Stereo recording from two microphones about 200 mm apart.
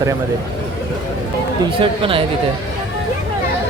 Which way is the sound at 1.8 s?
25° right (ahead or behind).